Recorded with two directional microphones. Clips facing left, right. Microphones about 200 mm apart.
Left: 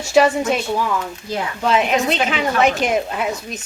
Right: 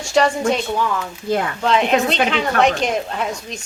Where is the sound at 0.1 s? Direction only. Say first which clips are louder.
Left 2 dB; 5° left (ahead or behind).